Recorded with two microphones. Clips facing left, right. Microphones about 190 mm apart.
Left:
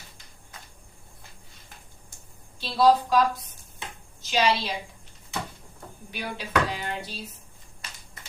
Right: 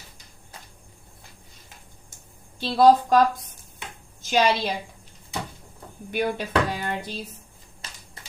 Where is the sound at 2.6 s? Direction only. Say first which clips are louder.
Right 4 dB; 50° right (ahead or behind).